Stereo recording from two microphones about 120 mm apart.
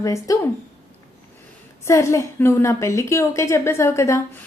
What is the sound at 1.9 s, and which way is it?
A woman's voice, 25° left (ahead or behind).